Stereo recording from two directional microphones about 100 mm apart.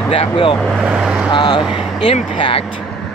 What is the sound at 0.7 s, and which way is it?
Speech, 5° right (ahead or behind).